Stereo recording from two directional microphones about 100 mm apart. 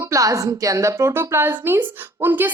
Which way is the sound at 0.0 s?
30° right (ahead or behind).